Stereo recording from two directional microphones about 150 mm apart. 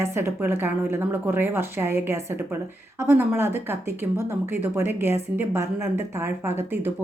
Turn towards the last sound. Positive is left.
turn(degrees=-15)  # may be behind; listen again after turning